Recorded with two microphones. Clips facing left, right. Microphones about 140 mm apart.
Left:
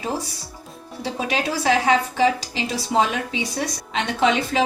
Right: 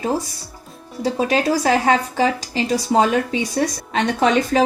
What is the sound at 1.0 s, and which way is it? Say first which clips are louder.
Speech: right 6 dB; 45° right (ahead or behind).